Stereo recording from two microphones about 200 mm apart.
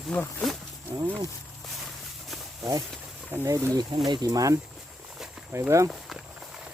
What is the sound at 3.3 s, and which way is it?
Speech, 15° right (ahead or behind).